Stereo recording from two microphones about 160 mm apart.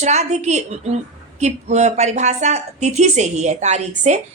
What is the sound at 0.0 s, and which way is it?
A woman's voice, 45° right (ahead or behind).